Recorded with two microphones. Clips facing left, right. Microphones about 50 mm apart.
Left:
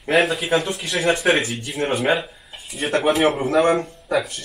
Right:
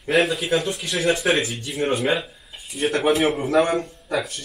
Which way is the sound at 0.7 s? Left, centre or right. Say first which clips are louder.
Left 1 dB; centre.